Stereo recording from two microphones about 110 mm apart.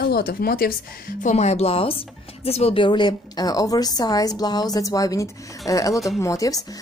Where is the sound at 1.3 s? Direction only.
75° left (ahead or behind).